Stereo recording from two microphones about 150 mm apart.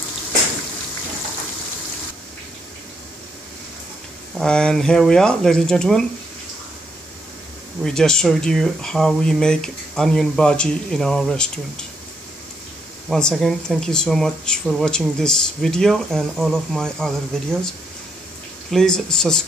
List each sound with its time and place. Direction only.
4.4 s speech: 5° left (ahead or behind)
7.8 s speech: 5° left (ahead or behind)
13.1 s speech: centre (ahead or behind)